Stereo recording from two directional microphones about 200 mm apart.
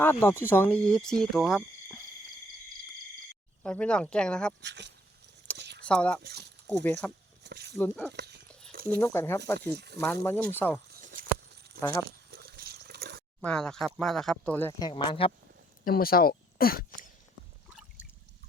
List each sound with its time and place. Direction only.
0.0 s speech: 10° left (ahead or behind)
3.6 s speech: 5° left (ahead or behind)
4.6 s a sound: 60° right (ahead or behind)
5.8 s speech: 5° left (ahead or behind)
7.4 s speech: 55° right (ahead or behind)
7.8 s speech: 5° left (ahead or behind)
8.1 s speech: 55° right (ahead or behind)
8.7 s a sound: 50° right (ahead or behind)
9.0 s speech: 10° left (ahead or behind)
9.6 s speech: 55° right (ahead or behind)
10.0 s speech: 10° left (ahead or behind)
10.8 s a sound: 50° right (ahead or behind)
13.4 s speech: 5° left (ahead or behind); by 15.3 s 25° left (ahead or behind)
15.8 s speech: 45° left (ahead or behind)